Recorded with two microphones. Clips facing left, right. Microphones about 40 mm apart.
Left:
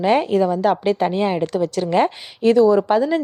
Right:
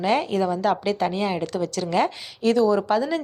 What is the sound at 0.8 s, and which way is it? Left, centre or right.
A woman's voice, left.